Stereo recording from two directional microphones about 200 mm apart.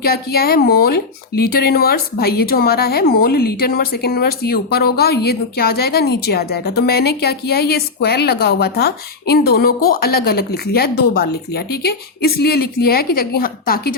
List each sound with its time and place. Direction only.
0.0 s speech: 50° left (ahead or behind)